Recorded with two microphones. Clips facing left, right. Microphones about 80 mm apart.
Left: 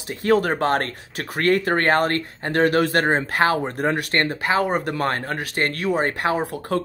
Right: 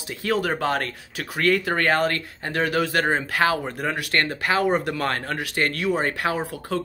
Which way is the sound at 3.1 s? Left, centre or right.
Left.